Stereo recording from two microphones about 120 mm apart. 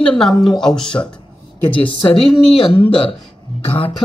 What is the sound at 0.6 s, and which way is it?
Speech, 5° left (ahead or behind).